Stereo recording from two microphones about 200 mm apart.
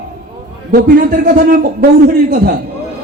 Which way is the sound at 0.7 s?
45° right (ahead or behind).